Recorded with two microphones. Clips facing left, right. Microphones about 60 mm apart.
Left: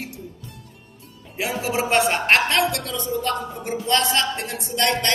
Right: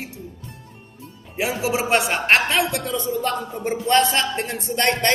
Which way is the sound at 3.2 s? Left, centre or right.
Right.